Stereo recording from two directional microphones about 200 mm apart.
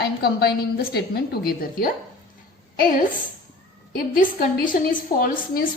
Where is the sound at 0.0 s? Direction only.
50° left (ahead or behind).